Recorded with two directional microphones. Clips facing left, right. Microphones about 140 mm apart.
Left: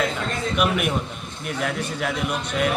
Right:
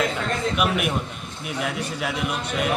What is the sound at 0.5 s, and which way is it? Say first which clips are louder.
A man's voice: left 4 dB; centre (ahead or behind).